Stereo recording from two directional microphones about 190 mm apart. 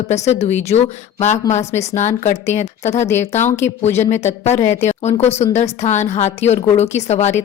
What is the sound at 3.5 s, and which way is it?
Speech, 15° left (ahead or behind).